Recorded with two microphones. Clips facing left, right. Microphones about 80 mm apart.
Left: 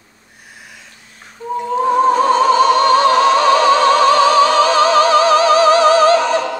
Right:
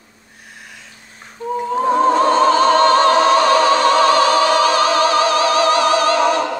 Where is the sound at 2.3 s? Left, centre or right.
Centre.